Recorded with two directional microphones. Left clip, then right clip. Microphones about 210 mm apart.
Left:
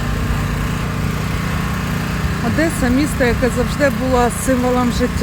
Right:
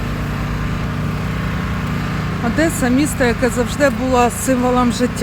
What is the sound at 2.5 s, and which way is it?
Speech, 10° right (ahead or behind).